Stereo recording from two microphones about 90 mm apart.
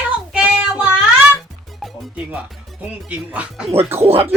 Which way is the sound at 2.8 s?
15° right (ahead or behind).